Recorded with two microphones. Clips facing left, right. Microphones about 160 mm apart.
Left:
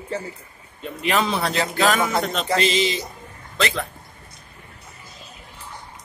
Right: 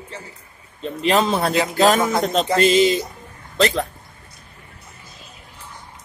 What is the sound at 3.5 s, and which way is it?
Speech, 40° right (ahead or behind).